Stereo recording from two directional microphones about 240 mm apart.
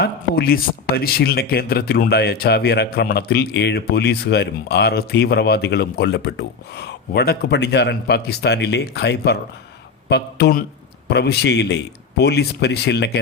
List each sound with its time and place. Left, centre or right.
0.0 s speech: left